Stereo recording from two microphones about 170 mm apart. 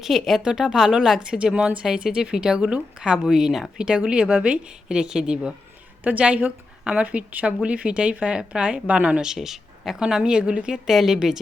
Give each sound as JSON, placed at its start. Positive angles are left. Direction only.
{"t": 0.0, "sound": "a woman's voice", "side_deg": 0}